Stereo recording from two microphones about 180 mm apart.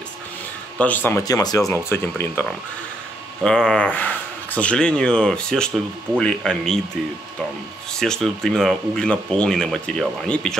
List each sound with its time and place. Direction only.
0.7 s speech: 10° left (ahead or behind)
3.4 s speech: 5° left (ahead or behind)
7.9 s speech: 5° left (ahead or behind)